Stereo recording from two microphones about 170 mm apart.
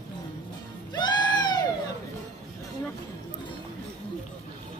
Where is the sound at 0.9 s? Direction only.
25° left (ahead or behind).